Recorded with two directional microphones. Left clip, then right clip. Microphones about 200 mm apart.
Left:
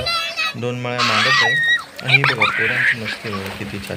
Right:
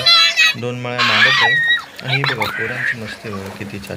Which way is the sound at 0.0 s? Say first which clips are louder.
Right 10 dB; 55° left (ahead or behind).